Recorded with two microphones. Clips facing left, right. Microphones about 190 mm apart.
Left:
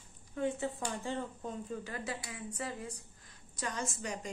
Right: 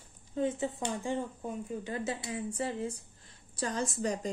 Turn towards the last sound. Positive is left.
turn(degrees=-35)  # may be behind; listen again after turning